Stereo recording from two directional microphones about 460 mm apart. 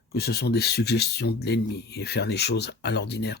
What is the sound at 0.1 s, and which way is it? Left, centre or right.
Speech, left.